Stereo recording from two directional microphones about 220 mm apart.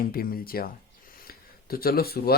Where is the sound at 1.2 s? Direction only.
45° left (ahead or behind).